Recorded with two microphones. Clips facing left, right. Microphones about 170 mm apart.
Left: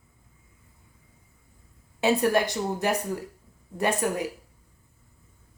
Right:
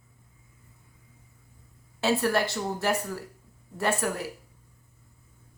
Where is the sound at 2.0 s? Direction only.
15° left (ahead or behind).